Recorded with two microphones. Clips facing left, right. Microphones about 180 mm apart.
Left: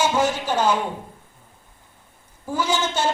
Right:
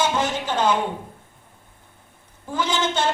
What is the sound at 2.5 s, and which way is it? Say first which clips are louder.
Speech: even; 10° left (ahead or behind).